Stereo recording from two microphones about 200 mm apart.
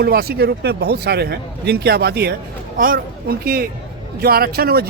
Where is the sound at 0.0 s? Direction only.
50° right (ahead or behind).